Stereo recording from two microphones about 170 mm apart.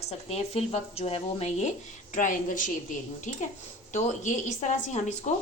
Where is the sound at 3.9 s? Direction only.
45° left (ahead or behind).